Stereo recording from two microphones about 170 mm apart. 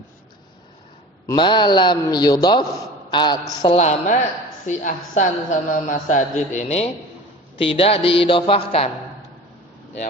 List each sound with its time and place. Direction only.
1.3 s a man's voice: 25° left (ahead or behind)
3.8 s a woman's voice: 45° left (ahead or behind)